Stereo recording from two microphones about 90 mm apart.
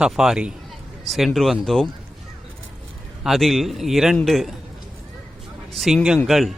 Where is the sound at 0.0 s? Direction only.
5° right (ahead or behind).